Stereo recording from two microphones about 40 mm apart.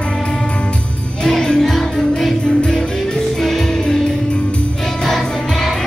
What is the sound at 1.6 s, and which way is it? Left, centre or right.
Music, centre.